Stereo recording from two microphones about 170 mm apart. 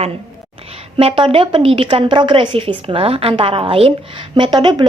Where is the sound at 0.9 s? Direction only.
30° right (ahead or behind).